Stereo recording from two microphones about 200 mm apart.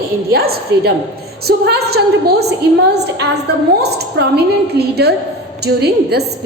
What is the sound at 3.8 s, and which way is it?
A woman's voice, 55° right (ahead or behind).